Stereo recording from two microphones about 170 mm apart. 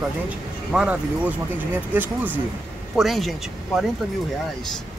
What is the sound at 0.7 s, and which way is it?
Speech, 5° right (ahead or behind).